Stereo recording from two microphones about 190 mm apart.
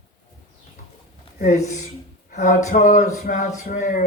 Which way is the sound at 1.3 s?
40° left (ahead or behind).